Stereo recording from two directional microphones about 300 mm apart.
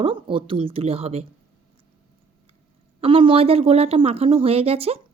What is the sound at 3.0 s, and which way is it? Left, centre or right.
A woman's voice, centre.